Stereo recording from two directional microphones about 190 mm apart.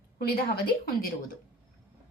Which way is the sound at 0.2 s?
55° left (ahead or behind).